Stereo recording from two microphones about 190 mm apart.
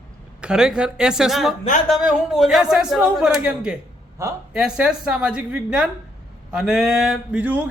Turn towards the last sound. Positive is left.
turn(degrees=-5)  # may be behind; listen again after turning